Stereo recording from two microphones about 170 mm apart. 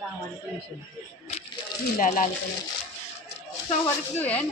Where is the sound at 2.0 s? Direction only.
50° left (ahead or behind).